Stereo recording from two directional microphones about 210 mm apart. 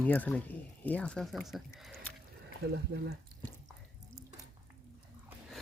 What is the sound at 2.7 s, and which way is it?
Speech, 50° right (ahead or behind).